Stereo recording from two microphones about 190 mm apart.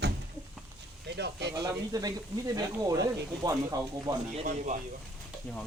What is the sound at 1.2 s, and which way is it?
Speech, 60° right (ahead or behind).